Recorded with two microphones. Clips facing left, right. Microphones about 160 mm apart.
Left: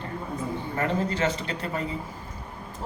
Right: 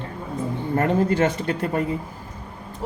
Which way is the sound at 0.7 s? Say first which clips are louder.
Right 8 dB; 50° right (ahead or behind).